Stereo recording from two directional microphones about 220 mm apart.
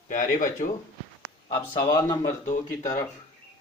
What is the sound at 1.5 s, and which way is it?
Speech, 20° left (ahead or behind).